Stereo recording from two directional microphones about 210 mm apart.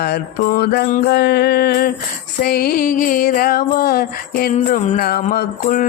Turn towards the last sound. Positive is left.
turn(degrees=40)  # may be behind; listen again after turning